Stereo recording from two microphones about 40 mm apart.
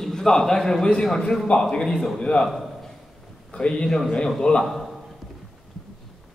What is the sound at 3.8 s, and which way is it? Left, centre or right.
Speech, centre.